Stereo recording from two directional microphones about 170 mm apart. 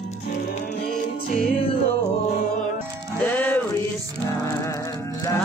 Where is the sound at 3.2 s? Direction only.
10° left (ahead or behind).